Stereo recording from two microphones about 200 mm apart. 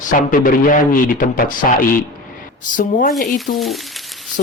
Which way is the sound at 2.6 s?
40° left (ahead or behind).